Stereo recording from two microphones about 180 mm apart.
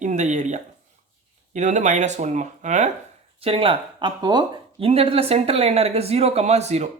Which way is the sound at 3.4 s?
30° right (ahead or behind).